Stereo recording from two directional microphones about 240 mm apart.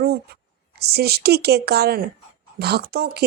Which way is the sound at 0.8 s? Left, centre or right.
Right.